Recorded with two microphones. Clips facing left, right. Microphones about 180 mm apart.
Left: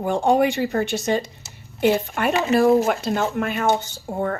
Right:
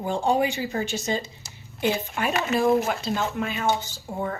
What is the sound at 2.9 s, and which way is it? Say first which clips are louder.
A woman's voice: left 5 dB; 55° left (ahead or behind).